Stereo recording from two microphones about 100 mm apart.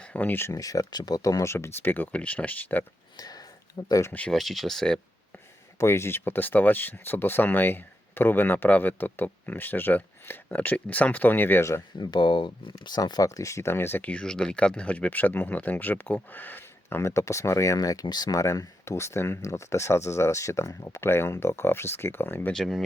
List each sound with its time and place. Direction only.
0.0 s speech: 15° left (ahead or behind)
3.2 s a sound: 40° left (ahead or behind)
4.3 s speech: centre (ahead or behind)
5.8 s speech: 25° left (ahead or behind)
11.9 s speech: 50° left (ahead or behind); by 22.5 s 20° left (ahead or behind)
22.5 s speech: centre (ahead or behind)